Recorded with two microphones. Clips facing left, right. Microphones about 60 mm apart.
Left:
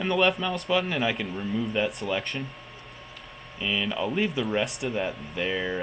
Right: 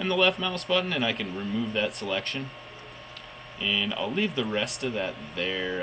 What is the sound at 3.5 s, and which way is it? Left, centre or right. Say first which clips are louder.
Speech: left 1 dB; centre.